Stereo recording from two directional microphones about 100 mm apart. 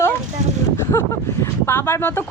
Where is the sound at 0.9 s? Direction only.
30° left (ahead or behind).